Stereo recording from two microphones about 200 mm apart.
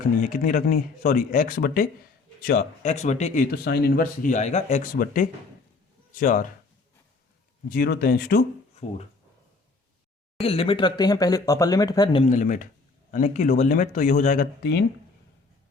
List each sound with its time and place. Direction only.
0.3 s a man's voice: 40° left (ahead or behind)
3.5 s a man's voice: 50° left (ahead or behind)
7.7 s speech: 45° left (ahead or behind)
10.4 s speech: 30° left (ahead or behind)
12.2 s a man's voice: 40° left (ahead or behind)
14.6 s speech: 55° left (ahead or behind)